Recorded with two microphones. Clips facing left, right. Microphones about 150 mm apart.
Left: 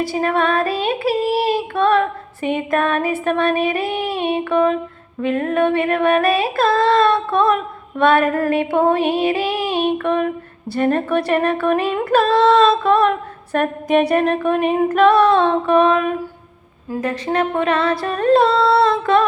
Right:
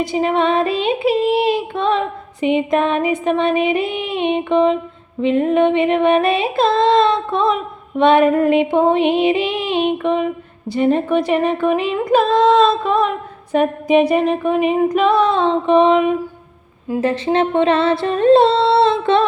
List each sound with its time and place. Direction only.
0.0 s female singing: 20° right (ahead or behind)